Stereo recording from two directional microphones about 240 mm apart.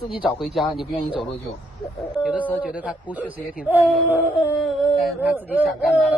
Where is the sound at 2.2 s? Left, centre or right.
Centre.